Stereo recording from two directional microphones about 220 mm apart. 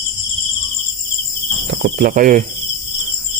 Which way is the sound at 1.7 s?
50° right (ahead or behind).